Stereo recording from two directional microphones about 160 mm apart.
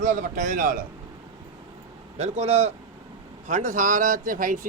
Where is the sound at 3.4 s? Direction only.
50° right (ahead or behind).